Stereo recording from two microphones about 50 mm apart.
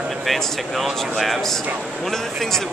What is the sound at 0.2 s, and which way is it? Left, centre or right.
Speech, centre.